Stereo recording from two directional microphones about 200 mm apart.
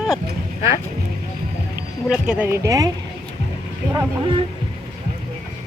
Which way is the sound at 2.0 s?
5° right (ahead or behind).